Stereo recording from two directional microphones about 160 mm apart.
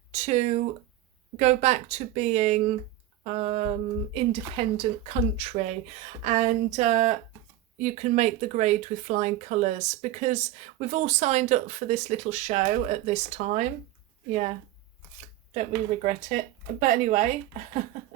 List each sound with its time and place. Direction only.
0.1 s speech: 45° right (ahead or behind)
16.8 s speech: 50° right (ahead or behind)